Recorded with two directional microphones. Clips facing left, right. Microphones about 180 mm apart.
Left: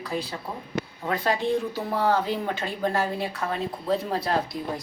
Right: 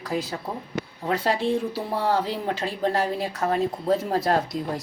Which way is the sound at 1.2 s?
30° right (ahead or behind).